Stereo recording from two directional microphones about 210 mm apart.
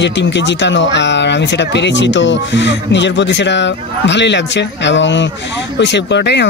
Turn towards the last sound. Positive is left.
turn(degrees=55)  # may be behind; listen again after turning